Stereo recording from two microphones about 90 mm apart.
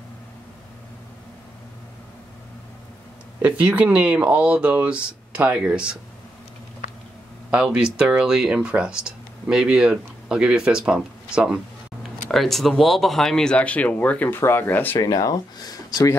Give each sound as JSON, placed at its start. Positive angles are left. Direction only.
{"t": 3.4, "sound": "speech", "side_deg": -15}
{"t": 7.5, "sound": "speech", "side_deg": -10}
{"t": 12.3, "sound": "speech", "side_deg": 0}
{"t": 15.0, "sound": "speech", "side_deg": 45}